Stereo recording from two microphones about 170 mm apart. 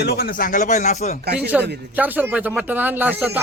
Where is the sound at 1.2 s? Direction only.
70° right (ahead or behind).